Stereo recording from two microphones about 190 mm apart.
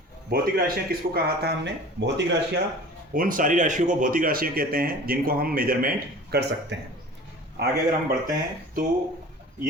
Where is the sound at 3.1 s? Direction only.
45° right (ahead or behind).